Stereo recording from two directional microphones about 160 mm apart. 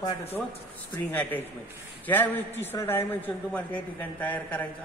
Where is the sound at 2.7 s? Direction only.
15° left (ahead or behind).